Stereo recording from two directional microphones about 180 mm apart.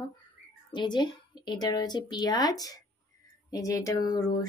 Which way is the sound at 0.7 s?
25° left (ahead or behind).